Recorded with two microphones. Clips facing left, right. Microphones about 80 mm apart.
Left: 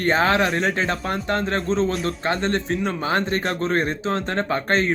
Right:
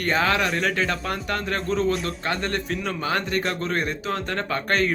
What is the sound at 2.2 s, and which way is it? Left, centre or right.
Speech, left.